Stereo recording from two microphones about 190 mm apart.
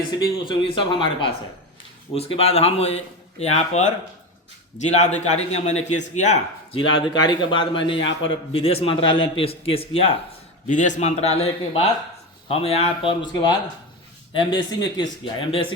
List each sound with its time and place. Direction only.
0.4 s a man's voice: 25° left (ahead or behind)
6.7 s speech: 25° left (ahead or behind)
10.7 s a man's voice: 40° left (ahead or behind)